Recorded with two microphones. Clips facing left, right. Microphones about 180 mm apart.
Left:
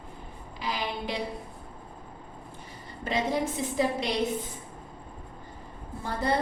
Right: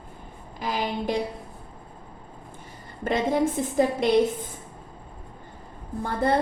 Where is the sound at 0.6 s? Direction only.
45° right (ahead or behind).